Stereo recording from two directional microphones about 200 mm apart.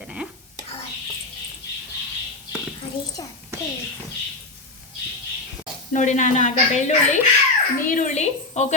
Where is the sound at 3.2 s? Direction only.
20° left (ahead or behind).